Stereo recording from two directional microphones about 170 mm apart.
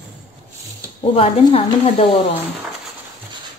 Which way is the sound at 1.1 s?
35° left (ahead or behind).